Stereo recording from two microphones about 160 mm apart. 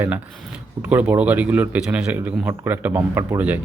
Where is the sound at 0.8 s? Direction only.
10° right (ahead or behind).